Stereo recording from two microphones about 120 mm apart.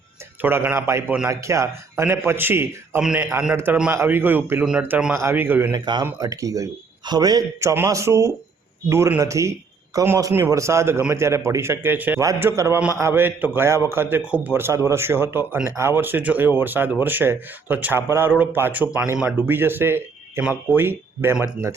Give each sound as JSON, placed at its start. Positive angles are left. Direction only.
{"t": 0.4, "sound": "speech", "side_deg": -15}
{"t": 3.0, "sound": "speech", "side_deg": -5}
{"t": 3.9, "sound": "speech", "side_deg": -15}
{"t": 5.7, "sound": "speech", "side_deg": -35}